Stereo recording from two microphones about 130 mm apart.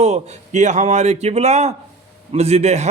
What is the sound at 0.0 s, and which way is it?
A man's voice, 60° right (ahead or behind).